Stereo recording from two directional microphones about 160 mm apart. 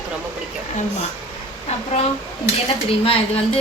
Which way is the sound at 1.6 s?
45° left (ahead or behind).